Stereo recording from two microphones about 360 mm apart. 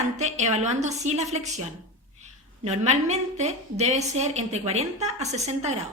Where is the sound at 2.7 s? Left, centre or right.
Centre.